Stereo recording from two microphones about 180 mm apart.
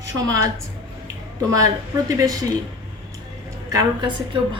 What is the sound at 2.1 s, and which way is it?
Speech, 20° right (ahead or behind).